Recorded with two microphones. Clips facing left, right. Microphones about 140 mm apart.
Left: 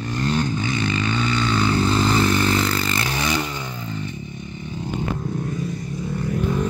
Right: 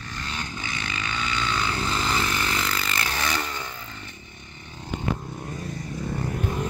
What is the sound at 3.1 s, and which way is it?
Vehicle, 15° left (ahead or behind).